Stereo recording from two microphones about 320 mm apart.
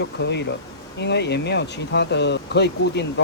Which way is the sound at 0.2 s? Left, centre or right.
Left.